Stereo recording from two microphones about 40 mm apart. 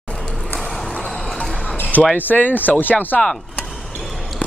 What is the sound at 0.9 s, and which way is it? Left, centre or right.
Music, centre.